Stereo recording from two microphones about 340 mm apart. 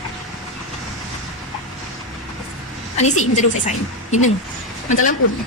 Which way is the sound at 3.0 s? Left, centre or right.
Left.